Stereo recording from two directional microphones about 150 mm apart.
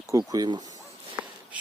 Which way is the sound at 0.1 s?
25° right (ahead or behind).